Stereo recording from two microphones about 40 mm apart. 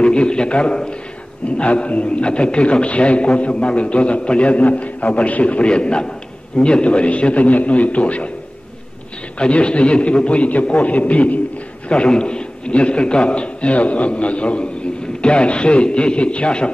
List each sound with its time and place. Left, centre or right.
0.0 s a man's voice: left
5.7 s a man's voice: left
9.4 s a man's voice: left
11.9 s a man's voice: left